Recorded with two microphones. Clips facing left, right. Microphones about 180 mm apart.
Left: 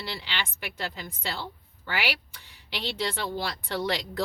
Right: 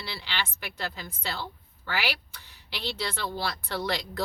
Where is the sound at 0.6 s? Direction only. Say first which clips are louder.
Left 1 dB; 15° left (ahead or behind).